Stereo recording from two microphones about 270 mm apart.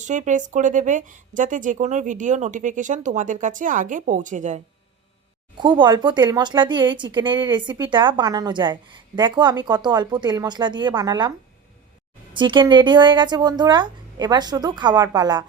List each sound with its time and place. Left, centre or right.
0.0 s speech: right
5.5 s speech: centre